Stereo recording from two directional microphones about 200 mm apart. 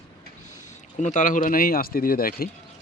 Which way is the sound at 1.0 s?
40° left (ahead or behind).